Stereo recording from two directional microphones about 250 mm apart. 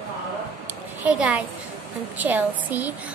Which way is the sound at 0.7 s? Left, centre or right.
Centre.